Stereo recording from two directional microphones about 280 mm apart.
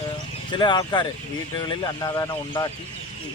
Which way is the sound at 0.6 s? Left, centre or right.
Centre.